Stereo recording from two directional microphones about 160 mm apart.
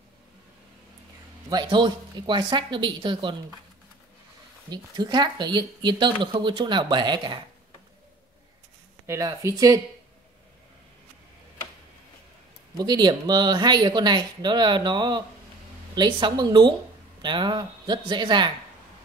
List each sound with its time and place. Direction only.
1.5 s speech: 25° right (ahead or behind)
4.6 s speech: 25° right (ahead or behind)
9.0 s speech: 20° right (ahead or behind)
12.7 s speech: 25° right (ahead or behind)